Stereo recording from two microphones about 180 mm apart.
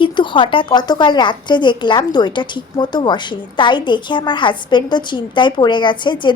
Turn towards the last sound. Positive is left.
turn(degrees=25)  # may be behind; listen again after turning